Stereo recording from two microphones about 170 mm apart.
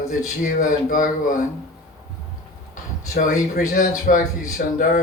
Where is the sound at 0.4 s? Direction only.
50° left (ahead or behind).